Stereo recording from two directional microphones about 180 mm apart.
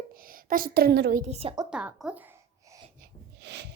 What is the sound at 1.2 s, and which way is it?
Speech, 35° right (ahead or behind).